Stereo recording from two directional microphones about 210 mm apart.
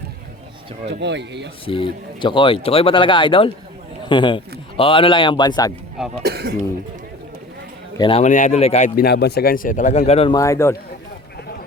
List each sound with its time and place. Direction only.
0.9 s speech: 55° right (ahead or behind)
1.6 s speech: 25° left (ahead or behind)
6.2 s speech: 50° right (ahead or behind)
7.9 s speech: 25° left (ahead or behind)
8.2 s a man's voice: 35° left (ahead or behind)
9.0 s a man's voice: 50° left (ahead or behind); by 10.3 s 30° left (ahead or behind)
10.3 s a man's voice: 15° left (ahead or behind)